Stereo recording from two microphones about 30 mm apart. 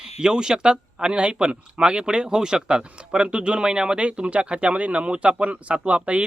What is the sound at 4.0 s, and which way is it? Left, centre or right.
Speech, right.